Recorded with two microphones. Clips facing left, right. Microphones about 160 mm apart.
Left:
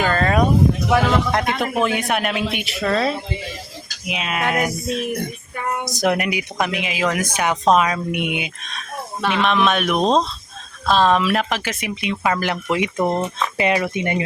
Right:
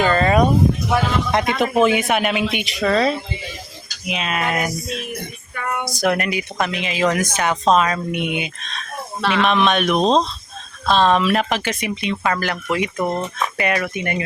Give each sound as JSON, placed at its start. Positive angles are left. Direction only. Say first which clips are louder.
{"t": 0.0, "sound": "a sound", "louder": "right 2 dB", "side_deg": 0}
{"t": 1.3, "sound": "speech", "louder": "right 2 dB", "side_deg": 0}
{"t": 5.8, "sound": "speech", "louder": "even", "side_deg": 20}
{"t": 12.4, "sound": "speech", "louder": "left 1 dB", "side_deg": 20}